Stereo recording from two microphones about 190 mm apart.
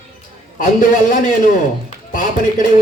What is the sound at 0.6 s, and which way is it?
Speech, 45° left (ahead or behind).